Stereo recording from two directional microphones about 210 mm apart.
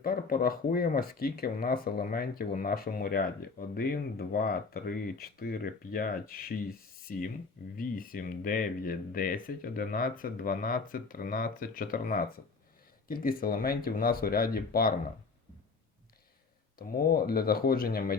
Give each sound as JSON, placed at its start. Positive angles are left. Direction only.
{"t": 0.0, "sound": "speech", "side_deg": 45}
{"t": 16.7, "sound": "speech", "side_deg": 45}